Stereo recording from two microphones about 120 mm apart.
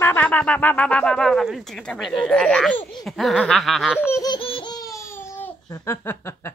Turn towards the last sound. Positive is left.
turn(degrees=20)  # may be behind; listen again after turning